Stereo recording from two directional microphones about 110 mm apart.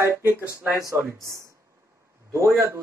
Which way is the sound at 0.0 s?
20° right (ahead or behind).